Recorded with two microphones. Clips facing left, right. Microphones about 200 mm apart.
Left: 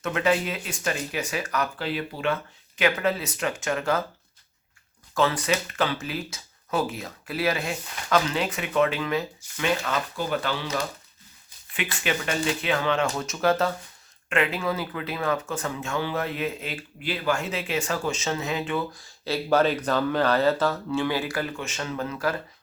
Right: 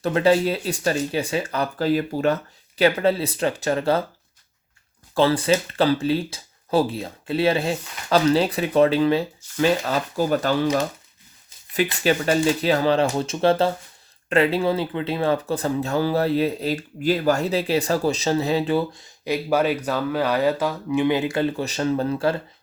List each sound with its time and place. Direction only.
0.0 s speech: 30° right (ahead or behind)
5.1 s speech: 30° right (ahead or behind)
12.0 s speech: 35° right (ahead or behind)